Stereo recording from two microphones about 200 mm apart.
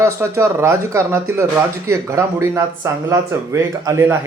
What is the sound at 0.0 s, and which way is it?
Speech, 15° right (ahead or behind).